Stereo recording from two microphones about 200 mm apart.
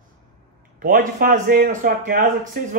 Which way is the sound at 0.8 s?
45° right (ahead or behind).